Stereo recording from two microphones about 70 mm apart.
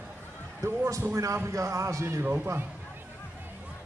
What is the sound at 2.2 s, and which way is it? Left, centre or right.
Speech, right.